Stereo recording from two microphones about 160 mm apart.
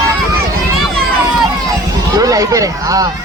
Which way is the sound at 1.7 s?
20° right (ahead or behind).